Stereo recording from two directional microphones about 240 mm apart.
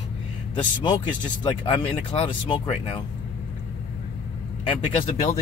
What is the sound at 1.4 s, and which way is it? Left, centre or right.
Speech, left.